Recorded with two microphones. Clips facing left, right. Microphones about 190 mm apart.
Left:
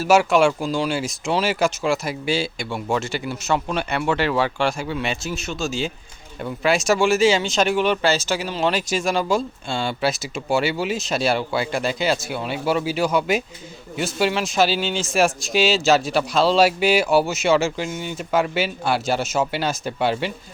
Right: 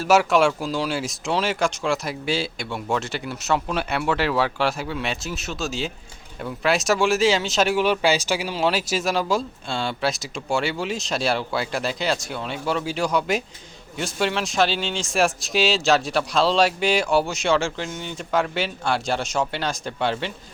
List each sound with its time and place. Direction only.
0.0 s speech: centre (ahead or behind)